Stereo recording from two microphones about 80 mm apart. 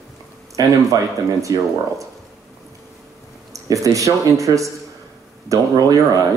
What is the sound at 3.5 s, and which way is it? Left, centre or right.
Speech, right.